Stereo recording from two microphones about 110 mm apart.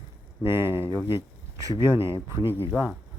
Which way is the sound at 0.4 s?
20° right (ahead or behind).